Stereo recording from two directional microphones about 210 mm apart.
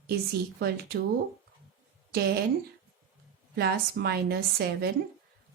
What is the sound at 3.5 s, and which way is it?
Speech, 50° right (ahead or behind).